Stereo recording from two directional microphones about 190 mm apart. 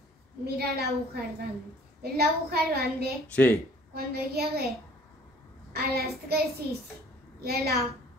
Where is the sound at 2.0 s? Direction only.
55° right (ahead or behind).